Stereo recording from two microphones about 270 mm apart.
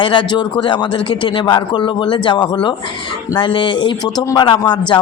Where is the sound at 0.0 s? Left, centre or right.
Centre.